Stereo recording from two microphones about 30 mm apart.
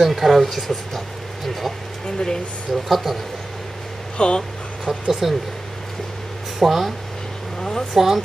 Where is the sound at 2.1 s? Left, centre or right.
Left.